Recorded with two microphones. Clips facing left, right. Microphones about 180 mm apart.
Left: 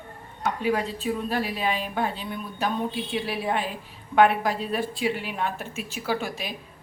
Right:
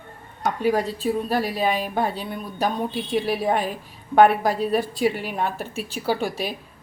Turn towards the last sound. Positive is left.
turn(degrees=-35)  # may be behind; listen again after turning